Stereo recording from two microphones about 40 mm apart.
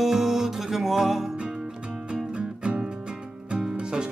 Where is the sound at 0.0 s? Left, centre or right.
Centre.